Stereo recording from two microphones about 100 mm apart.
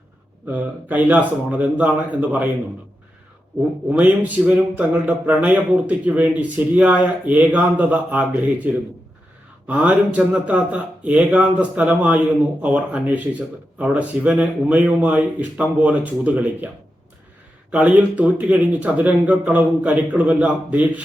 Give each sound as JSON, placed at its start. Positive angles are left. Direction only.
{"t": 0.4, "sound": "speech", "side_deg": -15}
{"t": 3.8, "sound": "speech", "side_deg": -15}
{"t": 17.7, "sound": "speech", "side_deg": -15}